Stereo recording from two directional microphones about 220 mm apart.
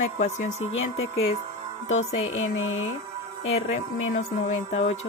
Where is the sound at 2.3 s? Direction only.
65° left (ahead or behind).